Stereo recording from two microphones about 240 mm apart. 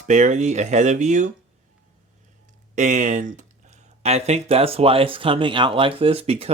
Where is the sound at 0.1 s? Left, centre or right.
Right.